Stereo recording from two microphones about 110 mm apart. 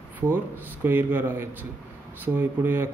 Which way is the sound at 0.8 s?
20° right (ahead or behind).